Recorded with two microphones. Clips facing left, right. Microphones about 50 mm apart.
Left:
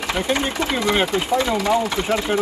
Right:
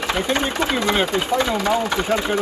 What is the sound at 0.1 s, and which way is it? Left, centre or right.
Speech, right.